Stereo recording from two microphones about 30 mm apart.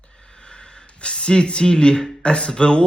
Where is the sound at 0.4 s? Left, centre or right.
Left.